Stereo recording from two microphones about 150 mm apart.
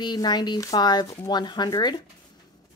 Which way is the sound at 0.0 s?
30° left (ahead or behind).